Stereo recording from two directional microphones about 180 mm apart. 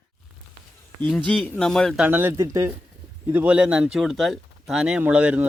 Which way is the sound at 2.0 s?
10° right (ahead or behind).